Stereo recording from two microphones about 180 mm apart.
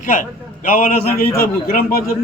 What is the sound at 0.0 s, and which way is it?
A man's voice, 45° left (ahead or behind).